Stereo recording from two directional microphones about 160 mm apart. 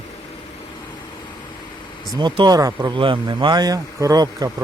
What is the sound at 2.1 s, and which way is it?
Speech, 30° right (ahead or behind).